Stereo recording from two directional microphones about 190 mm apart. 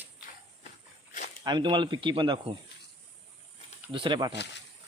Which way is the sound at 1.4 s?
25° right (ahead or behind).